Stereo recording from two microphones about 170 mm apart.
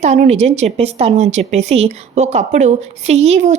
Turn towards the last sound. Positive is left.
turn(degrees=-40)  # may be behind; listen again after turning